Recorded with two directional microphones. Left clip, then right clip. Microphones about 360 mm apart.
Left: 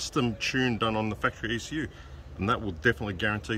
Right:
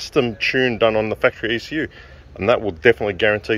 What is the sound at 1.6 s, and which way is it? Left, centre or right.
Speech, centre.